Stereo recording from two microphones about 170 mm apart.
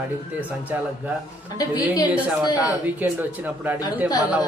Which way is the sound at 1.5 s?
25° left (ahead or behind).